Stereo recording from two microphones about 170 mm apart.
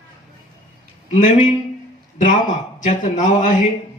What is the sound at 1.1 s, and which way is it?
A man's voice, 45° left (ahead or behind).